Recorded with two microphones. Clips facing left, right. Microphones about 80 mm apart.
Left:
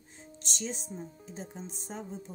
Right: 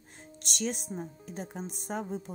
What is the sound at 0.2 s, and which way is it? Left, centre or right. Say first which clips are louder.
Speech: right 5 dB; right.